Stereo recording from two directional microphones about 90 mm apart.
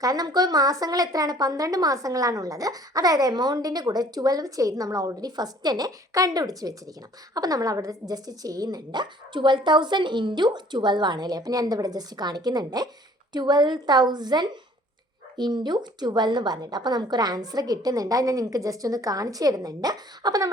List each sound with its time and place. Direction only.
0.0 s a woman's voice: 45° right (ahead or behind)